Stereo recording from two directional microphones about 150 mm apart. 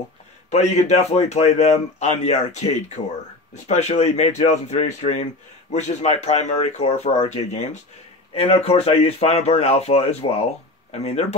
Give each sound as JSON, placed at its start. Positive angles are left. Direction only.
{"t": 0.5, "sound": "speech", "side_deg": 50}